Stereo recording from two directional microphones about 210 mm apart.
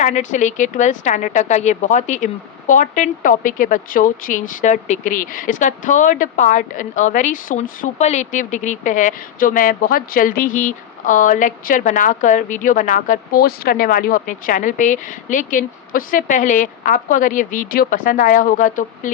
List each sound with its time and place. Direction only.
0.0 s a woman's voice: 35° left (ahead or behind)